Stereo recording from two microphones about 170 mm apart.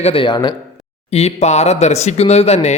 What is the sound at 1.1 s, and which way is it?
Speech, 40° left (ahead or behind).